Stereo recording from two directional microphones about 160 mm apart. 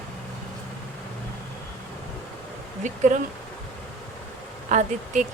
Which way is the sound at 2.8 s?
50° right (ahead or behind).